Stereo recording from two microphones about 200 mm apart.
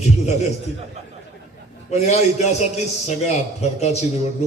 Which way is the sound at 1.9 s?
35° left (ahead or behind).